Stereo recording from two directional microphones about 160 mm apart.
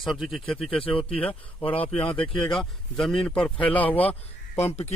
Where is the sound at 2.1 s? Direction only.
30° left (ahead or behind).